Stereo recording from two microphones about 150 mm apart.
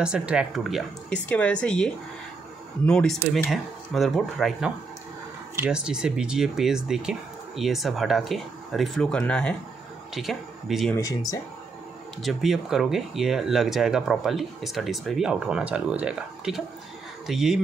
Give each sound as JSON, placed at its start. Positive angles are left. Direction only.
{"t": 0.0, "sound": "a woman's voice", "side_deg": -5}
{"t": 11.0, "sound": "speech", "side_deg": 20}
{"t": 12.2, "sound": "speech", "side_deg": 0}